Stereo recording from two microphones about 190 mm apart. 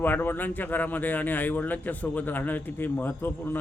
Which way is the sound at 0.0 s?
10° left (ahead or behind).